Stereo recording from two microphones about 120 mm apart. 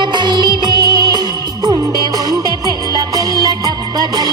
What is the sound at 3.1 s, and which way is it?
Music, 30° right (ahead or behind).